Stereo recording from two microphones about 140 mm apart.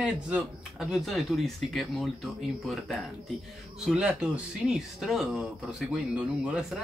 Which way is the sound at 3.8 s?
5° right (ahead or behind).